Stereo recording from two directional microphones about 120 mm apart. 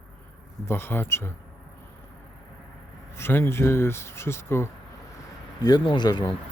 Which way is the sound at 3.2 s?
20° left (ahead or behind).